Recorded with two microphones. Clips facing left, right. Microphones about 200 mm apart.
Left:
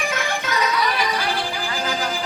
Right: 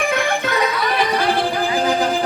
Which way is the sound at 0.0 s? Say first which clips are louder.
Right 6 dB; 55° right (ahead or behind).